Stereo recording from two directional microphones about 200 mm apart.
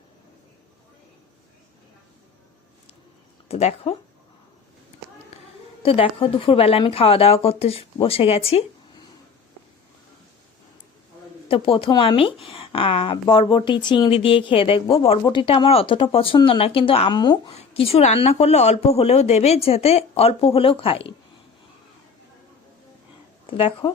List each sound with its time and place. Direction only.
3.5 s speech: 30° left (ahead or behind)
5.3 s a sound: 30° left (ahead or behind)
5.8 s speech: 25° left (ahead or behind)
11.4 s speech: 25° left (ahead or behind)
23.5 s speech: 25° left (ahead or behind)